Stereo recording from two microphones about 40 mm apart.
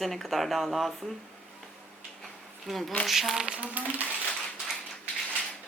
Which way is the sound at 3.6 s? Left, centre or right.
Right.